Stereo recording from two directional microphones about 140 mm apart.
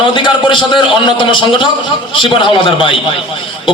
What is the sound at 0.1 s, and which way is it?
A man's voice, 35° left (ahead or behind).